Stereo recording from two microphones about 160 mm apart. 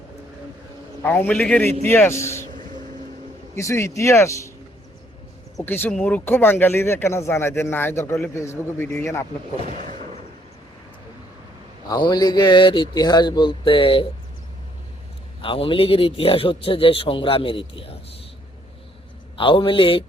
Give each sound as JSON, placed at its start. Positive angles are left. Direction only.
{"t": 1.0, "sound": "speech", "side_deg": 15}
{"t": 3.6, "sound": "a man's voice", "side_deg": 20}
{"t": 5.6, "sound": "speech", "side_deg": 15}
{"t": 9.6, "sound": "speech", "side_deg": -50}
{"t": 11.9, "sound": "a man's voice", "side_deg": 25}
{"t": 15.4, "sound": "a man's voice", "side_deg": 35}
{"t": 19.4, "sound": "a man's voice", "side_deg": 30}